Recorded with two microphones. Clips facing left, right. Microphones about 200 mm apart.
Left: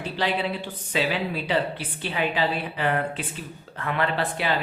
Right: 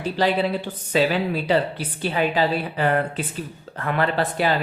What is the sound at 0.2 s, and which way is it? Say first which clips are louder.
Speech: right 5 dB; 40° right (ahead or behind).